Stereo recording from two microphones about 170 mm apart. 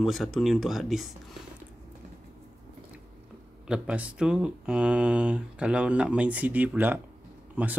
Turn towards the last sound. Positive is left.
turn(degrees=-10)  # may be behind; listen again after turning